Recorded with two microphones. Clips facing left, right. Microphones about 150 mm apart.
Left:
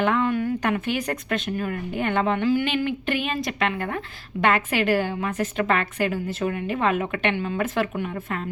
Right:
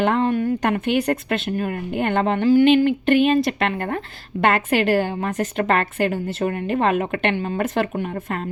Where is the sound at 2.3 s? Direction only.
40° right (ahead or behind).